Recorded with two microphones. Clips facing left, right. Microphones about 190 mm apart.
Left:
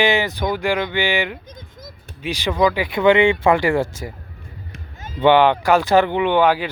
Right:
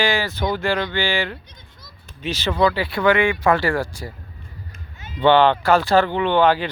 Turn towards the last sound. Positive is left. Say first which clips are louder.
# left 1 dB
turn(degrees=10)  # may be behind; listen again after turning